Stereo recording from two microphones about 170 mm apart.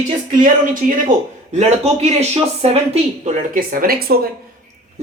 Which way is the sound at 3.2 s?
50° right (ahead or behind).